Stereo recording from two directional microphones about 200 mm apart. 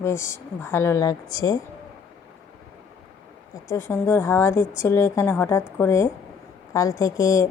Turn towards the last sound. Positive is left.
turn(degrees=15)  # may be behind; listen again after turning